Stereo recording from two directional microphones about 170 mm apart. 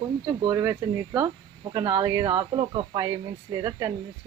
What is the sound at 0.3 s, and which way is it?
Speech, 20° right (ahead or behind).